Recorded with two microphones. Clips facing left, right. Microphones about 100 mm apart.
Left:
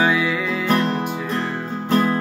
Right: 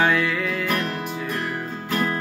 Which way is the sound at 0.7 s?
30° left (ahead or behind).